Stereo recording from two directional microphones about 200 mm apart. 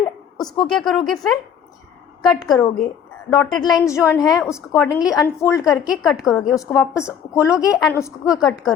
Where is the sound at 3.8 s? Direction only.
15° left (ahead or behind).